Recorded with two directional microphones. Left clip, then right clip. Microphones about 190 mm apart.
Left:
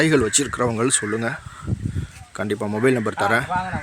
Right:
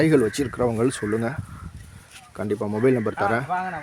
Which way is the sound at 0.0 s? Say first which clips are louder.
Left 1 dB; 10° right (ahead or behind).